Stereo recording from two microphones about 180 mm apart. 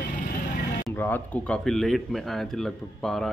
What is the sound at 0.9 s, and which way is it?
Speech, 10° left (ahead or behind).